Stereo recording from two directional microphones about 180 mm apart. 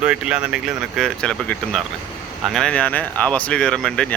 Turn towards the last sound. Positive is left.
turn(degrees=5)  # may be behind; listen again after turning